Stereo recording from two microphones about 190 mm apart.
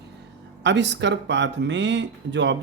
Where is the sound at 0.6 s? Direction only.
65° right (ahead or behind).